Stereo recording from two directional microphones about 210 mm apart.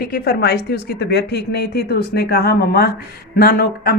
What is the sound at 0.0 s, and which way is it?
A woman's voice, 45° left (ahead or behind).